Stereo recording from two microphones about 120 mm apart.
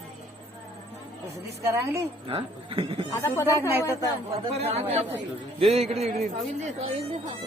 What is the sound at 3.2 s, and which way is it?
Speech, 25° left (ahead or behind).